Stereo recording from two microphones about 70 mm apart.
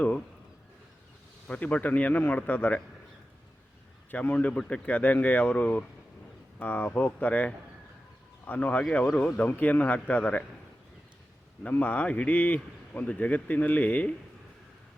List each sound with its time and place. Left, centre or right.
1.5 s a man's voice: centre
4.1 s a man's voice: left
11.7 s a man's voice: left